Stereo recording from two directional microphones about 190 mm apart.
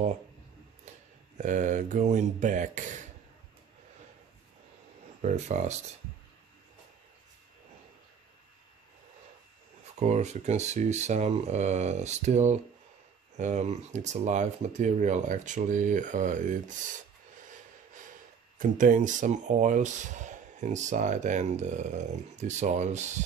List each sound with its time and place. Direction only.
1.4 s speech: 40° right (ahead or behind)
5.2 s speech: 40° right (ahead or behind)
9.9 s speech: 35° right (ahead or behind)
18.6 s speech: 45° right (ahead or behind)